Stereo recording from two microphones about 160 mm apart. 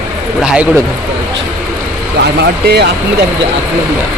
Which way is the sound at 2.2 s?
90° right.